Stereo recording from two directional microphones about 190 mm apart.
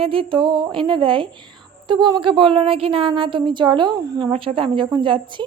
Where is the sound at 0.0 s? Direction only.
30° right (ahead or behind).